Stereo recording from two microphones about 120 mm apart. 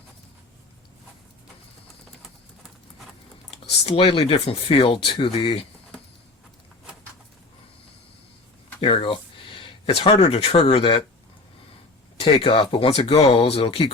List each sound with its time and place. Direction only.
3.6 s speech: 50° left (ahead or behind)
8.8 s a sound: 45° left (ahead or behind)
10.3 s speech: 55° left (ahead or behind)
12.2 s speech: 50° left (ahead or behind)